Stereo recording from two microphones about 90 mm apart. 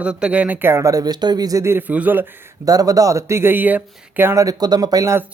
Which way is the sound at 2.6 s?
45° right (ahead or behind).